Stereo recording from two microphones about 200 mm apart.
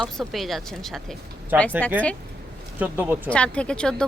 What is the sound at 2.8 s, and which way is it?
Speech, 10° right (ahead or behind).